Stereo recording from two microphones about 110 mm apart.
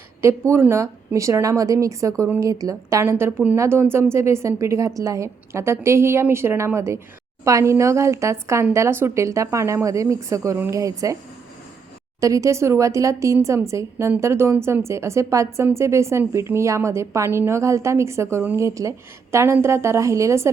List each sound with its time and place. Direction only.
0.2 s a woman's voice: 25° right (ahead or behind)
12.2 s a woman's voice: 30° right (ahead or behind)